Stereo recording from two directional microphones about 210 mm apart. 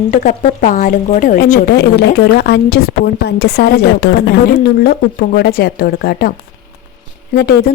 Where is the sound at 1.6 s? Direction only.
55° left (ahead or behind).